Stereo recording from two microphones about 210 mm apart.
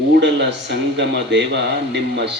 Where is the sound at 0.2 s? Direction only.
55° right (ahead or behind).